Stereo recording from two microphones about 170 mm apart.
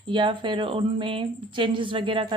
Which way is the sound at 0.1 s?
30° right (ahead or behind).